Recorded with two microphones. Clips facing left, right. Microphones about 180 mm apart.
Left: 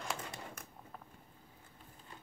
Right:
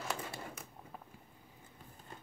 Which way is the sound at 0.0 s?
Centre (ahead or behind).